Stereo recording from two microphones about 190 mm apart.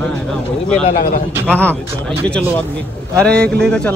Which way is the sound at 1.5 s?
5° left (ahead or behind).